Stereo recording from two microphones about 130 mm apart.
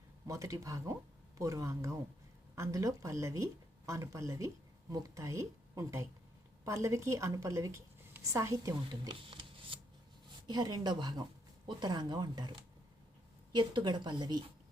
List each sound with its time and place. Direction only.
0.3 s a woman's voice: 25° right (ahead or behind); by 9.7 s 40° right (ahead or behind)
10.4 s a woman's voice: 30° right (ahead or behind)